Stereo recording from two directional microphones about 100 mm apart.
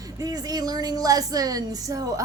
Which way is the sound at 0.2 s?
40° right (ahead or behind).